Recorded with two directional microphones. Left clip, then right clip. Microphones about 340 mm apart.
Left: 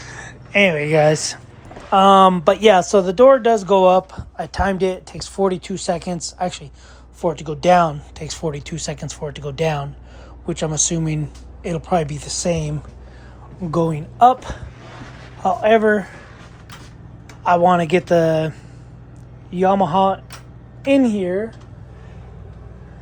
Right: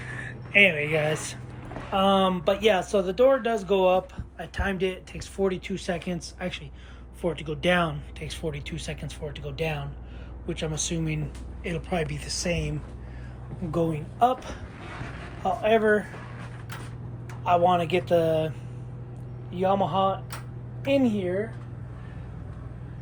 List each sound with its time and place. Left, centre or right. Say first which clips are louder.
0.0 s a sound: left 2 dB; centre
0.5 s speech: left 5 dB; left
1.9 s speech: left 12 dB; left
11.6 s speech: left 10 dB; left
13.7 s speech: left 7 dB; left
17.5 s speech: left 7 dB; left
17.9 s speech: left 7 dB; left
19.5 s speech: left 8 dB; left